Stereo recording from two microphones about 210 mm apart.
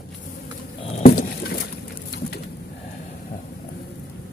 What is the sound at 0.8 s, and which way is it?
Rowboat, 30° left (ahead or behind).